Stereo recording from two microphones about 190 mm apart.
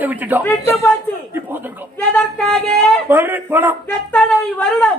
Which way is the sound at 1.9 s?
5° left (ahead or behind).